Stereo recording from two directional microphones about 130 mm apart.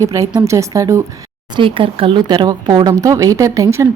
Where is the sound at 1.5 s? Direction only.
40° right (ahead or behind); by 3.8 s 25° right (ahead or behind).